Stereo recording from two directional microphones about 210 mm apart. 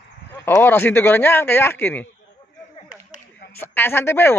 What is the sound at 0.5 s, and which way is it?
Speech, 10° left (ahead or behind).